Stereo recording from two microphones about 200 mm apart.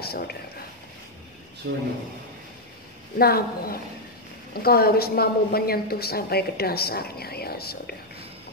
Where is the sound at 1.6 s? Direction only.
75° right (ahead or behind).